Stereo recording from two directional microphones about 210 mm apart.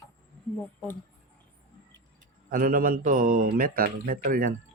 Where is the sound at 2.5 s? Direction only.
45° right (ahead or behind).